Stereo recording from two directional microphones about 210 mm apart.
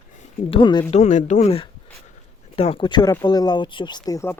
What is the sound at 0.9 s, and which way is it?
Speech, 35° left (ahead or behind).